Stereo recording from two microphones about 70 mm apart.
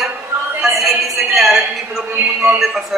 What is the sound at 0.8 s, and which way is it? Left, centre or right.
A man's voice, centre.